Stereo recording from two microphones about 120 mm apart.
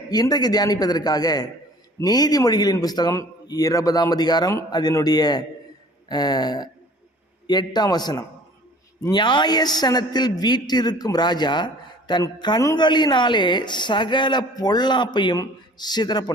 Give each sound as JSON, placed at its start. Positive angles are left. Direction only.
{"t": 0.1, "sound": "speech", "side_deg": 35}